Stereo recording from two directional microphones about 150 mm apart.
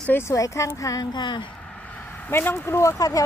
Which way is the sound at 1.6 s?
10° left (ahead or behind).